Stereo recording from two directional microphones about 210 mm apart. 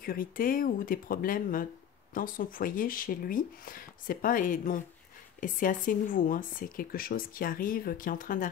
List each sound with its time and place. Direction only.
0.0 s speech: 45° left (ahead or behind)